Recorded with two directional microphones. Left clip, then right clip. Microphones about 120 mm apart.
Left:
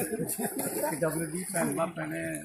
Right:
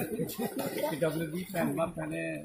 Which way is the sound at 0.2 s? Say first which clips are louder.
Even; 40° right (ahead or behind).